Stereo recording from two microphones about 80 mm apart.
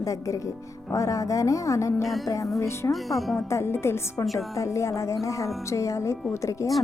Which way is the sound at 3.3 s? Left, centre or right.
Left.